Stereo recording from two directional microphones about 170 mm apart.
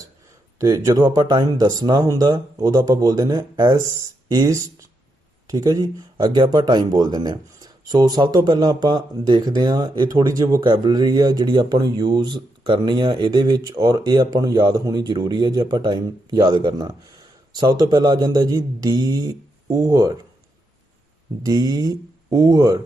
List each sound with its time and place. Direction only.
0.6 s speech: 20° right (ahead or behind)
21.4 s speech: 20° right (ahead or behind)